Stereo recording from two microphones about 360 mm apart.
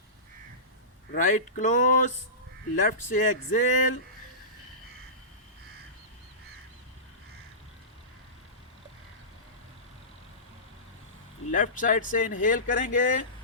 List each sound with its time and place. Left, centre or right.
1.1 s speech: left
11.5 s speech: left